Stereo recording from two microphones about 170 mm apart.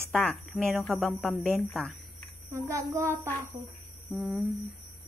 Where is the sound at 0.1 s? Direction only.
5° left (ahead or behind).